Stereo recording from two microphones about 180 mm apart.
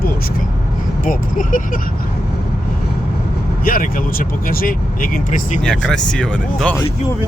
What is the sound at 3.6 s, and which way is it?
Speech, 50° left (ahead or behind).